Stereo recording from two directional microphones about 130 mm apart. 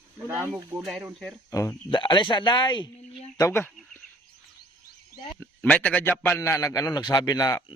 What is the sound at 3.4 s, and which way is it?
Speech, 20° left (ahead or behind).